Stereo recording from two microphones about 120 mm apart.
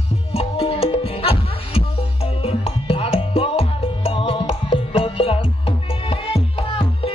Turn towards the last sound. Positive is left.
turn(degrees=50)  # may be behind; listen again after turning